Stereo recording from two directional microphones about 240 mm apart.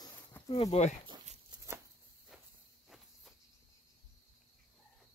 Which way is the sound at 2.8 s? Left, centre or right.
Centre.